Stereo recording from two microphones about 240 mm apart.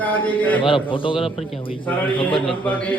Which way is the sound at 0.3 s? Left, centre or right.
Centre.